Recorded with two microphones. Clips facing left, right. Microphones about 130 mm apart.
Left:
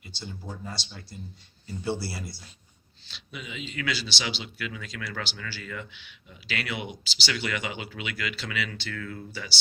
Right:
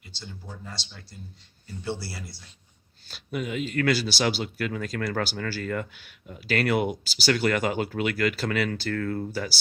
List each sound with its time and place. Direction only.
1.8 s speech: 10° left (ahead or behind)
3.1 s speech: 50° right (ahead or behind)